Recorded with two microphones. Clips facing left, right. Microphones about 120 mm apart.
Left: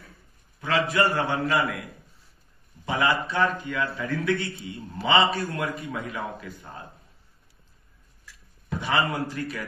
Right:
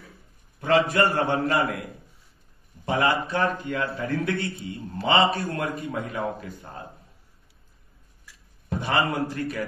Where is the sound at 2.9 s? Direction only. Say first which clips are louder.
Right 1 dB; 30° right (ahead or behind).